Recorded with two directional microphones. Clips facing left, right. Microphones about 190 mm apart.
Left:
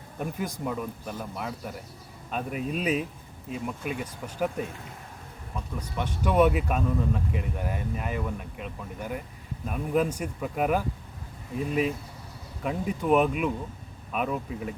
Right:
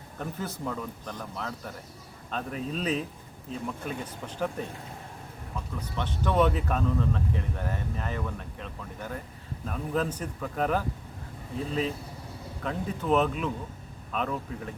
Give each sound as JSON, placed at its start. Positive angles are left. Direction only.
{"t": 0.2, "sound": "speech", "side_deg": 15}
{"t": 6.0, "sound": "speech", "side_deg": 10}